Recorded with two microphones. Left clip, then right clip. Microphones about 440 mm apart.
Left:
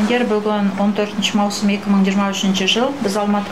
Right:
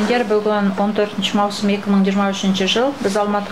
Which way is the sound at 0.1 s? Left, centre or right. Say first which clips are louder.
Right 2 dB; centre.